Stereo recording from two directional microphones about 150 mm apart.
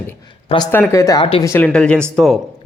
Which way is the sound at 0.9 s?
20° left (ahead or behind).